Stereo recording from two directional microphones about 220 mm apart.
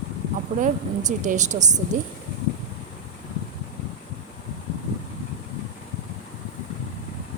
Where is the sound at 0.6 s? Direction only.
35° right (ahead or behind).